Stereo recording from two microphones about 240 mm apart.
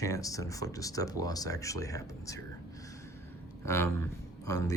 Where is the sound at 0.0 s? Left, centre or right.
Centre.